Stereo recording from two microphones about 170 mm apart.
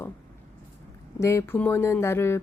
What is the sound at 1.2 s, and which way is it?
Speech, 15° left (ahead or behind).